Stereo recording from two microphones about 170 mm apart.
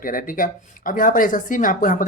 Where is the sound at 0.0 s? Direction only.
55° left (ahead or behind).